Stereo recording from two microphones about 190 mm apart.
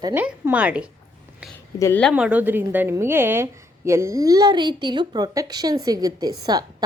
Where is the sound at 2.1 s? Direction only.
5° right (ahead or behind).